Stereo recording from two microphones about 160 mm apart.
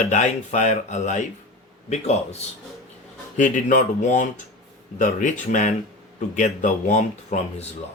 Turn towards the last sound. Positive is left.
turn(degrees=45)  # may be behind; listen again after turning